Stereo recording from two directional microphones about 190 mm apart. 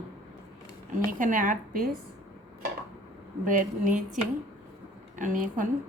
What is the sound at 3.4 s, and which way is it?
A woman's voice, 45° right (ahead or behind).